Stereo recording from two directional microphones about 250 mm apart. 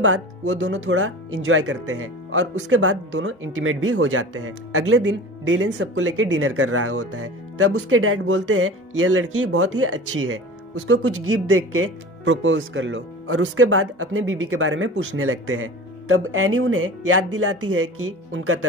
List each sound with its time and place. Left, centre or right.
0.4 s speech: right